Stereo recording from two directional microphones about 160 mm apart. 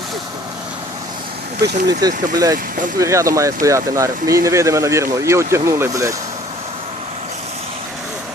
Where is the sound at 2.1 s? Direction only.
55° right (ahead or behind).